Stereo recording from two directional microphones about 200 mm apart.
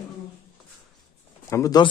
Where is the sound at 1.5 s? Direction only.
20° left (ahead or behind).